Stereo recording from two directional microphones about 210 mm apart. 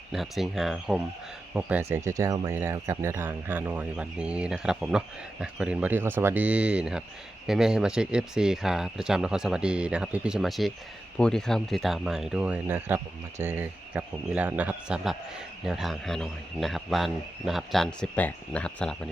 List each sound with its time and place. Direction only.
0.1 s speech: centre (ahead or behind)